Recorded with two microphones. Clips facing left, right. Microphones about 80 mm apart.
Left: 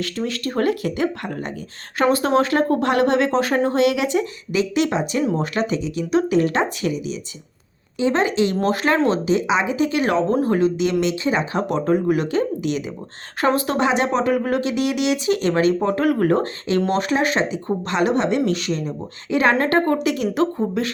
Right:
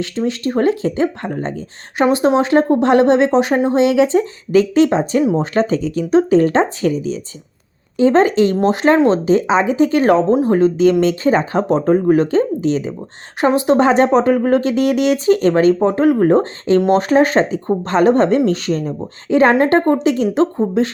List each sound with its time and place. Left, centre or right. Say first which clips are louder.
0.0 s speech: right 5 dB; right
2.0 s speech: right 4 dB; centre
5.2 s speech: right 5 dB; centre
5.5 s speech: right 6 dB; right
8.5 s speech: right 6 dB; right
13.4 s speech: right 6 dB; right
13.7 s speech: right 7 dB; right